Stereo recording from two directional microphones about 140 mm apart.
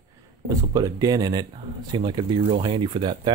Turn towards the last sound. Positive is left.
turn(degrees=-35)  # may be behind; listen again after turning